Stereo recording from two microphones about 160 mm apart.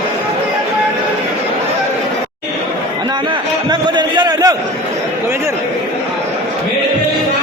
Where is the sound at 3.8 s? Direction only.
25° right (ahead or behind).